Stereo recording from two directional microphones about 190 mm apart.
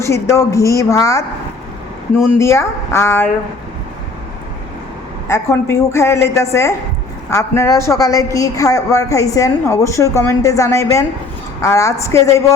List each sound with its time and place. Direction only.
0.0 s a woman's voice: 15° left (ahead or behind)
2.4 s a woman's voice: 15° left (ahead or behind)
5.3 s a woman's voice: 15° left (ahead or behind)